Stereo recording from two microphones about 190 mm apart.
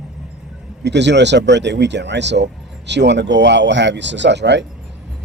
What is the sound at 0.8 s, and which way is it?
A man's voice, 65° right (ahead or behind).